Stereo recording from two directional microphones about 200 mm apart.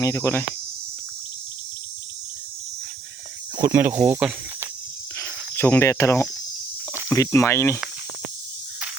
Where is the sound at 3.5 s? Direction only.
20° right (ahead or behind).